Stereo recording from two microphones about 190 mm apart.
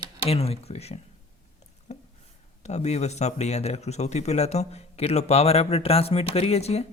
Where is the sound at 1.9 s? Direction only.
35° left (ahead or behind).